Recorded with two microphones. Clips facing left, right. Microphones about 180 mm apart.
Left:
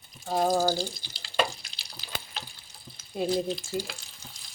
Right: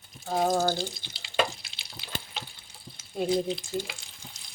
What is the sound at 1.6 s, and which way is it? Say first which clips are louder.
Water: right 1 dB; 25° right (ahead or behind).